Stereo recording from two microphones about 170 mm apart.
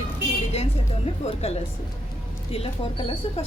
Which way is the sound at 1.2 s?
40° left (ahead or behind).